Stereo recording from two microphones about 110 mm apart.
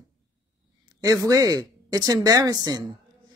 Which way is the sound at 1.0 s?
30° right (ahead or behind).